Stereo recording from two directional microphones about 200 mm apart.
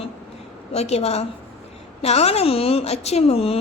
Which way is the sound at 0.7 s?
30° left (ahead or behind).